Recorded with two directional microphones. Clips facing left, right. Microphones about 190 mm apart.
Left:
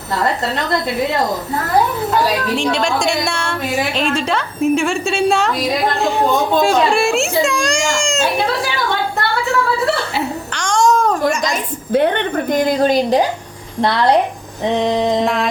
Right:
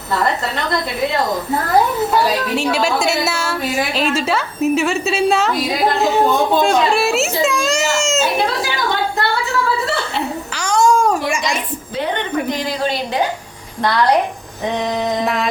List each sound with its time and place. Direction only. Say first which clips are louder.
2.6 s a woman's voice: even; 5° right (ahead or behind)
10.5 s a sound: even; 5° right (ahead or behind)
11.4 s a sound: left 2 dB; 55° left (ahead or behind)
12.5 s a woman's voice: left 6 dB; 50° left (ahead or behind)
13.8 s a woman's voice: left 1 dB; 25° left (ahead or behind)
15.2 s a woman's voice: left 2 dB; centre (ahead or behind)